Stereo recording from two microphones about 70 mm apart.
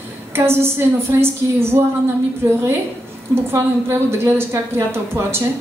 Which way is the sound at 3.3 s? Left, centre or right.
Right.